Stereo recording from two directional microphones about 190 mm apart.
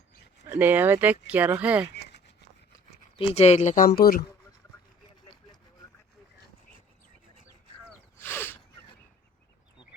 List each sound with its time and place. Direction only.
0.4 s speech: 10° right (ahead or behind)
3.2 s speech: 30° left (ahead or behind); by 4.2 s 50° left (ahead or behind)
8.2 s a sound: 10° left (ahead or behind)